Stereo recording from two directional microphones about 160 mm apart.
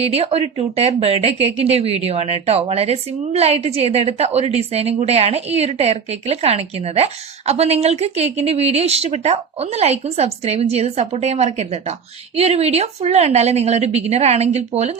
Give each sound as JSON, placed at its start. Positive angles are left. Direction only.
{"t": 0.0, "sound": "speech", "side_deg": -40}